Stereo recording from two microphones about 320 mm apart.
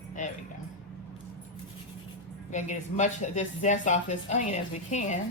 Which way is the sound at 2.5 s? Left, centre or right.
Left.